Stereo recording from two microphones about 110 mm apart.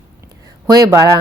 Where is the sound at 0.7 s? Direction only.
30° right (ahead or behind).